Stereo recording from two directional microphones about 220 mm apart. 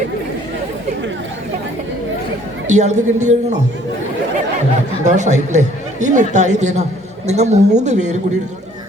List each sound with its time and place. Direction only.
2.6 s speech: 30° right (ahead or behind)
5.0 s speech: 30° right (ahead or behind)